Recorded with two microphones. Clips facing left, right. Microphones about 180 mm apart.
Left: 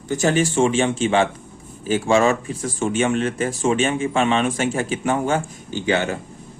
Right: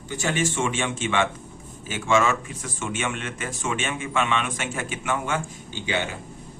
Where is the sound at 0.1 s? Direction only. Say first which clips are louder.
Left 7 dB; 40° left (ahead or behind).